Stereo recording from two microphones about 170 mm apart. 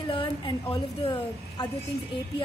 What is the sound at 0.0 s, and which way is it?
A woman's voice, 30° left (ahead or behind).